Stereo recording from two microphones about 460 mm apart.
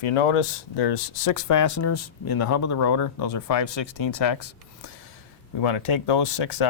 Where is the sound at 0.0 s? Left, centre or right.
Left.